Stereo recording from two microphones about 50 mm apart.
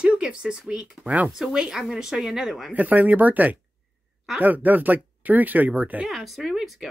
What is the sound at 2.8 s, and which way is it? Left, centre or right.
Speech, right.